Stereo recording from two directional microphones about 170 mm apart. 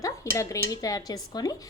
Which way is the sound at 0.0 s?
20° left (ahead or behind).